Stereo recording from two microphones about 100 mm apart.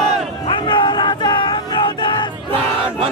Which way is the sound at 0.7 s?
50° left (ahead or behind).